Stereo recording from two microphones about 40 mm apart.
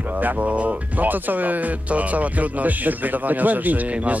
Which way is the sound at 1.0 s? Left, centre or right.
Right.